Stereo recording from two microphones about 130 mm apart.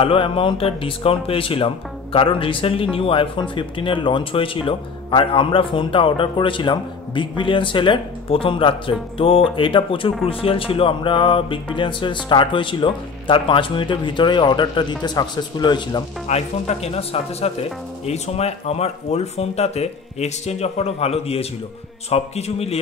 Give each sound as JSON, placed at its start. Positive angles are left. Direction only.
{"t": 0.0, "sound": "speech", "side_deg": 45}
{"t": 16.3, "sound": "speech", "side_deg": 55}